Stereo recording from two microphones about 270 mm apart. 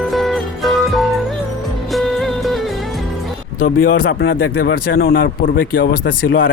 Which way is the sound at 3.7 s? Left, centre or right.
Left.